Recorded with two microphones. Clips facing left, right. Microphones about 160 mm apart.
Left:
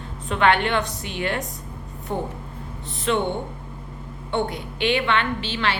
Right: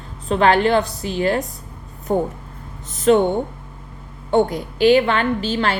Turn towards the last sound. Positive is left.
turn(degrees=-40)  # may be behind; listen again after turning